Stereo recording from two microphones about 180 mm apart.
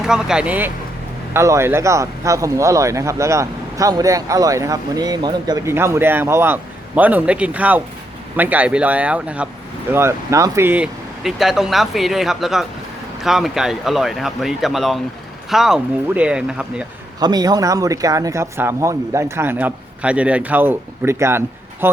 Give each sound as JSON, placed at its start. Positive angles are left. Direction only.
{"t": 0.0, "sound": "speech", "side_deg": -5}
{"t": 17.2, "sound": "speech", "side_deg": -20}